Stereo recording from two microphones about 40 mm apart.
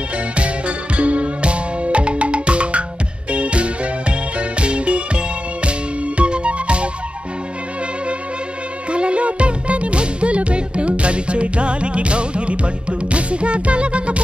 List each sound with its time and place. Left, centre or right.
0.4 s music: right
8.9 s music: right